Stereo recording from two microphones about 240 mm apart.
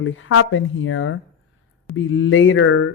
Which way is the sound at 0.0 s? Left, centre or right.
Left.